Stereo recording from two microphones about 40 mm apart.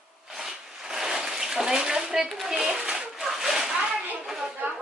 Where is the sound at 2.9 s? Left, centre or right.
Centre.